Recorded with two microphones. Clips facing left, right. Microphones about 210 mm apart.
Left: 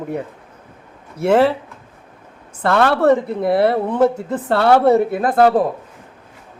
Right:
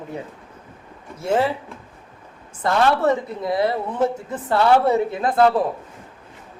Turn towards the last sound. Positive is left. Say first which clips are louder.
# left 3 dB
turn(degrees=45)  # may be behind; listen again after turning